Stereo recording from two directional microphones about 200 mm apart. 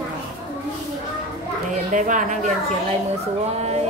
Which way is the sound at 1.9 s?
40° right (ahead or behind).